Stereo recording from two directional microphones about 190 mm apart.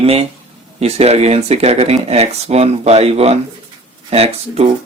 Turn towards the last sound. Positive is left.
turn(degrees=-30)  # may be behind; listen again after turning